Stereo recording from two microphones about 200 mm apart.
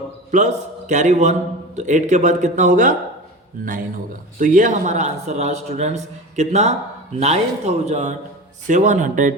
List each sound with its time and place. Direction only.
0.3 s a man's voice: 35° right (ahead or behind)
4.4 s a man's voice: 40° right (ahead or behind)